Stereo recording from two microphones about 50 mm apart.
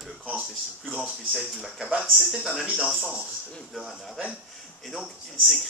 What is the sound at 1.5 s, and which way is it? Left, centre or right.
Speech, centre.